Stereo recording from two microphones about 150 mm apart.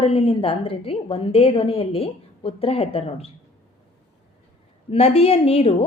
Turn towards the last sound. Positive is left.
turn(degrees=40)  # may be behind; listen again after turning